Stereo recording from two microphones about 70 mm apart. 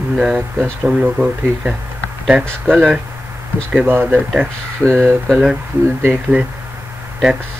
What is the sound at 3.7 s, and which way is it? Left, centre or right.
Speech, right.